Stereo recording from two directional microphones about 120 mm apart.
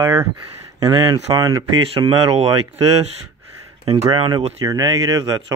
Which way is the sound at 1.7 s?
50° right (ahead or behind).